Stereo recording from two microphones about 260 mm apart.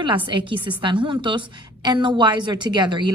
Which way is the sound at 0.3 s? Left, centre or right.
Centre.